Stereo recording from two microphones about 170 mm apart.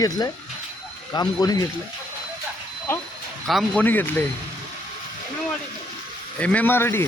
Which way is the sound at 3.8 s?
10° left (ahead or behind).